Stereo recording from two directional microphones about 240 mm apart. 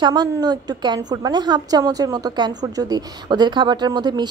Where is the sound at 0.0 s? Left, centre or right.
Centre.